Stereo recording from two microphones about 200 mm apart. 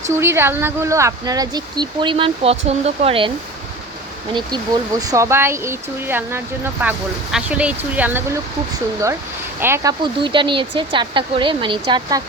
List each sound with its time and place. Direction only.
0.1 s speech: 15° right (ahead or behind)
4.4 s speech: 20° right (ahead or behind)
9.6 s speech: 10° right (ahead or behind)